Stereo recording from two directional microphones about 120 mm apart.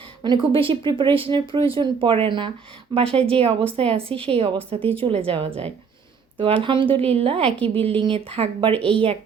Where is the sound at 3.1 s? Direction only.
55° right (ahead or behind).